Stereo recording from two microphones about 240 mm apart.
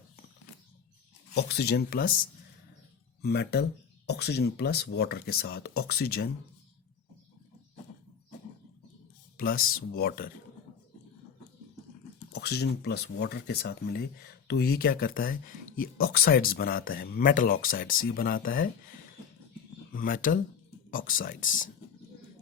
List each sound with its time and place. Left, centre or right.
1.3 s speech: left
3.2 s speech: left
9.4 s speech: left
12.3 s speech: left
19.9 s speech: left